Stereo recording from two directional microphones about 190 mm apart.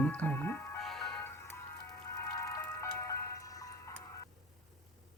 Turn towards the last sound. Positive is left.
turn(degrees=20)  # may be behind; listen again after turning